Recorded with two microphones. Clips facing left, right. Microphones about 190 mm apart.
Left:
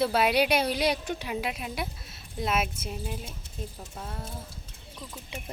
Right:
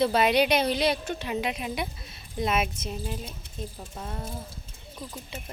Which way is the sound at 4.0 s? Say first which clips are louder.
Right 3 dB; centre (ahead or behind).